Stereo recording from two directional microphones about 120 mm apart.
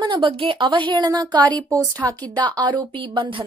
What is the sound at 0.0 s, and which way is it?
A woman's voice, 45° right (ahead or behind).